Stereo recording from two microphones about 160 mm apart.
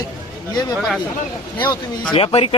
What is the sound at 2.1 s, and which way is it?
Speech, 35° left (ahead or behind).